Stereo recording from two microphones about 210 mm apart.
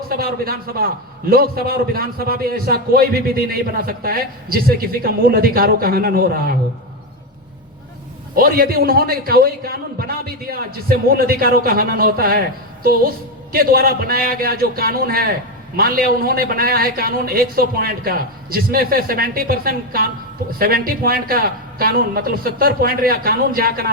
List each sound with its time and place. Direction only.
0.1 s a man's voice: 45° right (ahead or behind)
8.4 s a man's voice: 45° right (ahead or behind)
13.5 s a man's voice: 45° right (ahead or behind)